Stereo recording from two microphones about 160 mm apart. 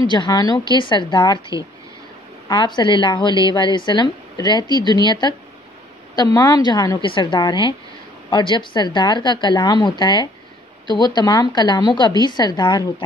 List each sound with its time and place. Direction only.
0.1 s a woman's voice: 25° left (ahead or behind)
2.4 s a woman's voice: 30° left (ahead or behind)